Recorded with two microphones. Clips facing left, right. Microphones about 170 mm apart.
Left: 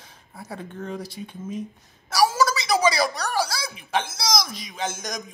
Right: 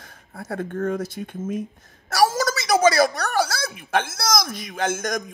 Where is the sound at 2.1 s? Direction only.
50° right (ahead or behind).